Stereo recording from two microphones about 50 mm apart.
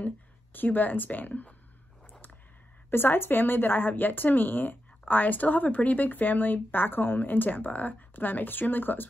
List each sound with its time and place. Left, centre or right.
0.0 s speech: left
2.9 s speech: left